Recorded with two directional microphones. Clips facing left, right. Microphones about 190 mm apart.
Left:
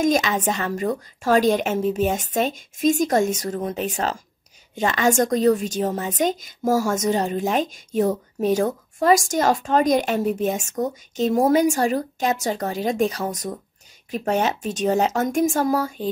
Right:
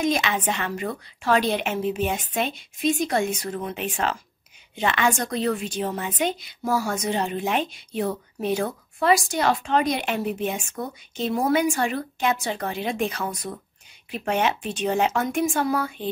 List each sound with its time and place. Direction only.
0.0 s a woman's voice: 40° left (ahead or behind)